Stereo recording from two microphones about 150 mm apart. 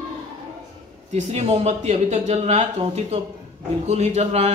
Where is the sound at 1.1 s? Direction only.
45° right (ahead or behind).